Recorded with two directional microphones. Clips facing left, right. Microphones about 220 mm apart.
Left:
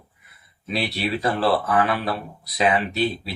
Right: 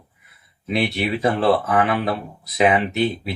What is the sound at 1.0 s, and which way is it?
Speech, 25° right (ahead or behind).